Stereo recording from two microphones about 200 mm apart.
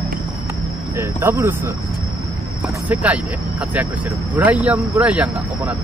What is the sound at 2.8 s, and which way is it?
Speech, 5° right (ahead or behind).